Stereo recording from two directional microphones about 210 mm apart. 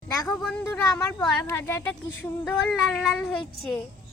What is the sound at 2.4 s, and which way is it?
Female singing, centre (ahead or behind).